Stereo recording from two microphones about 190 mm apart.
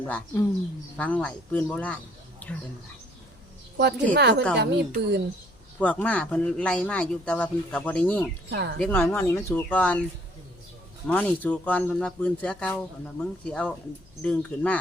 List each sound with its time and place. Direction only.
0.9 s speech: 5° left (ahead or behind)
3.8 s a woman's voice: 60° right (ahead or behind)
5.8 s speech: 10° left (ahead or behind)
8.4 s a woman's voice: 60° right (ahead or behind)
8.8 s speech: 10° left (ahead or behind)
11.0 s speech: 5° left (ahead or behind)